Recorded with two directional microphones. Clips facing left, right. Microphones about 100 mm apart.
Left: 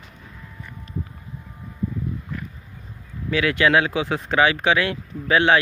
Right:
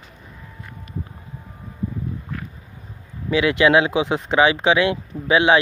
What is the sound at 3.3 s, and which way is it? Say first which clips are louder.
Speech: right 3 dB; 20° right (ahead or behind).